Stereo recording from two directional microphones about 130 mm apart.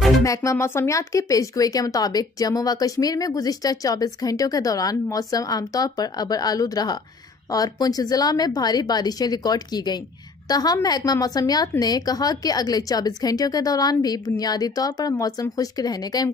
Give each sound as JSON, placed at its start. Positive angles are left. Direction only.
{"t": 0.2, "sound": "a woman's voice", "side_deg": 25}